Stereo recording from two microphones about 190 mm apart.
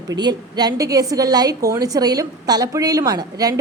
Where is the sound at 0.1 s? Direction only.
20° right (ahead or behind).